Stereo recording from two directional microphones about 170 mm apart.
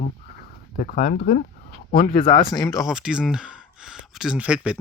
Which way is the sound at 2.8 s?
5° right (ahead or behind).